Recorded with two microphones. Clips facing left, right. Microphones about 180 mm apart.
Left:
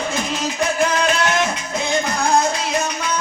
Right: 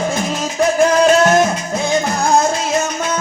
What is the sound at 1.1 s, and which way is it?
Music, 40° right (ahead or behind).